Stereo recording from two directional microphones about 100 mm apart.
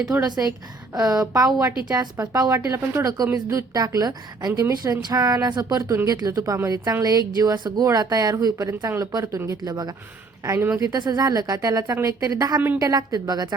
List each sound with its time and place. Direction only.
0.1 s speech: 40° right (ahead or behind)
8.8 s speech: 25° right (ahead or behind)
12.5 s a woman's voice: 15° right (ahead or behind)
12.8 s speech: 40° right (ahead or behind)